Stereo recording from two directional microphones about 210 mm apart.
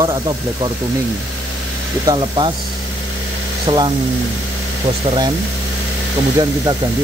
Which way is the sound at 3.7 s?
25° right (ahead or behind).